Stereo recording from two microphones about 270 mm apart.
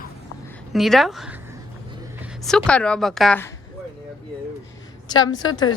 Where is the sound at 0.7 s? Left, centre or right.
Centre.